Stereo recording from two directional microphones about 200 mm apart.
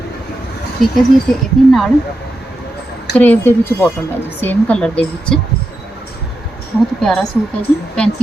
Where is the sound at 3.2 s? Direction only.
10° left (ahead or behind).